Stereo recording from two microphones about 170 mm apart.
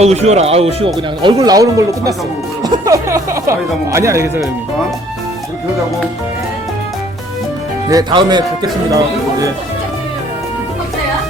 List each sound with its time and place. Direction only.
0.0 s speech: 40° right (ahead or behind)
1.2 s speech: 25° right (ahead or behind)
7.9 s speech: 25° right (ahead or behind)